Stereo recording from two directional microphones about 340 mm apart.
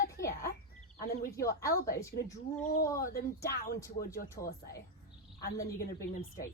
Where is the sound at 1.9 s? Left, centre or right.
Centre.